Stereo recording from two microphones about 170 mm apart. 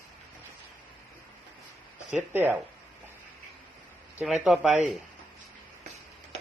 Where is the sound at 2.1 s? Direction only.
10° right (ahead or behind).